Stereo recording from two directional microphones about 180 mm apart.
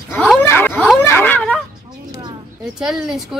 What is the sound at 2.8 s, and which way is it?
Speech, 5° right (ahead or behind).